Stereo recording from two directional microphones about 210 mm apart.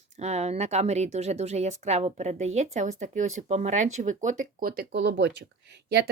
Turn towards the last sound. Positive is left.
turn(degrees=-50)  # may be behind; listen again after turning